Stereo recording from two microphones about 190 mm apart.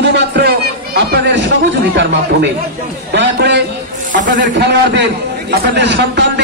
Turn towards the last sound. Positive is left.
turn(degrees=-70)  # may be behind; listen again after turning